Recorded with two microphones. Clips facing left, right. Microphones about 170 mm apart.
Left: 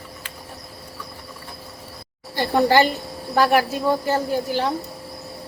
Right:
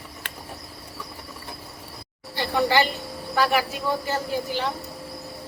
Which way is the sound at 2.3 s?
50° left (ahead or behind).